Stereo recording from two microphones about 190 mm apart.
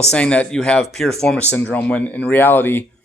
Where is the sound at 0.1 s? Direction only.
5° left (ahead or behind).